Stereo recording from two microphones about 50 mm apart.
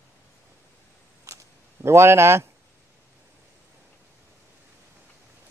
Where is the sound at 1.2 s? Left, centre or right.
Right.